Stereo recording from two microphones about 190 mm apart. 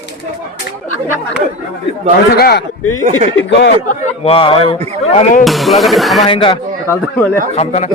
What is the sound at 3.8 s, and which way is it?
Speech, 35° left (ahead or behind).